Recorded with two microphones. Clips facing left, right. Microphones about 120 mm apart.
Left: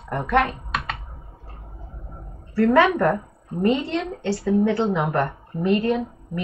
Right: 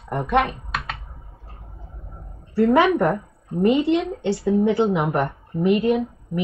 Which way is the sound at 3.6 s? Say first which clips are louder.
Right 4 dB; 20° right (ahead or behind).